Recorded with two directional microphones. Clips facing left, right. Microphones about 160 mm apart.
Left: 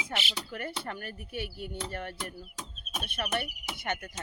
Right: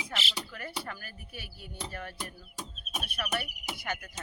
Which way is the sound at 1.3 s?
65° left (ahead or behind).